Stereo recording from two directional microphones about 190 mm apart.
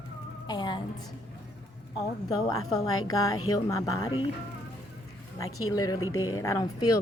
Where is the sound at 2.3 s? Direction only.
20° left (ahead or behind).